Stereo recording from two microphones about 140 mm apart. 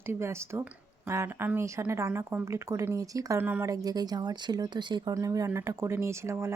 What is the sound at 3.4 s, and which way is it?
Speech, 15° right (ahead or behind).